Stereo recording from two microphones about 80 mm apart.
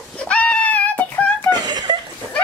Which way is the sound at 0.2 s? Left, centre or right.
Centre.